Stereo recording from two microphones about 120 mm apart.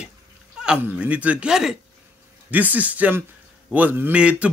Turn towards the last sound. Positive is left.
turn(degrees=-10)  # may be behind; listen again after turning